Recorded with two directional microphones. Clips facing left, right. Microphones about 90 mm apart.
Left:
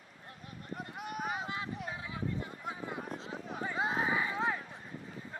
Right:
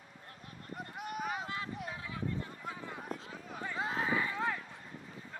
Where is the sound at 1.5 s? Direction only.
20° left (ahead or behind).